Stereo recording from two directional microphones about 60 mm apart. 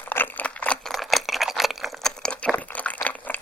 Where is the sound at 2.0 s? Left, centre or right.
Centre.